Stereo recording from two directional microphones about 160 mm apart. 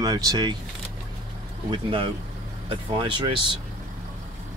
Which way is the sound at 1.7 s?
35° right (ahead or behind).